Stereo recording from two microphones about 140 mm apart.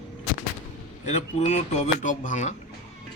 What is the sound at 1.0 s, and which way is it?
Speech, 55° left (ahead or behind).